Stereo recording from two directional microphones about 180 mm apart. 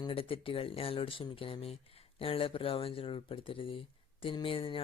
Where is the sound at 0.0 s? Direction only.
30° left (ahead or behind).